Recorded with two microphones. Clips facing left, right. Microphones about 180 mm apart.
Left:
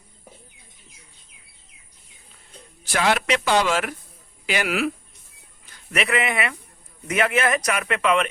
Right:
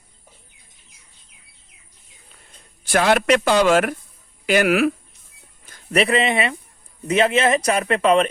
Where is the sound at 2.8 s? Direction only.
50° right (ahead or behind).